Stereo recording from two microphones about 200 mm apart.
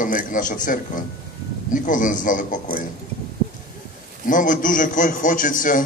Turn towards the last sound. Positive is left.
turn(degrees=40)  # may be behind; listen again after turning